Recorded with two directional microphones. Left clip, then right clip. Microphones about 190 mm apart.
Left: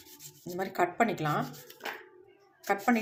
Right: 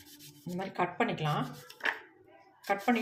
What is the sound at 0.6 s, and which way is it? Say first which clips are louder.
Speech: left 4 dB; 35° left (ahead or behind).